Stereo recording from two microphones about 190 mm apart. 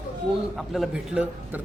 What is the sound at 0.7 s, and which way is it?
Speech, centre (ahead or behind).